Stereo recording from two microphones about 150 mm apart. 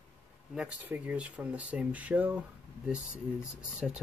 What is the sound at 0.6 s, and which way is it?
Speech, 10° right (ahead or behind).